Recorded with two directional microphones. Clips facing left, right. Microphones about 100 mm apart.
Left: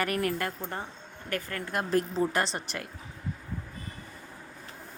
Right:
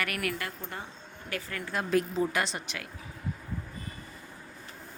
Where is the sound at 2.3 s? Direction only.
35° left (ahead or behind).